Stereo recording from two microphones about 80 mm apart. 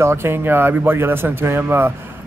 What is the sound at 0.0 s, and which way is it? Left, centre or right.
A man's voice, right.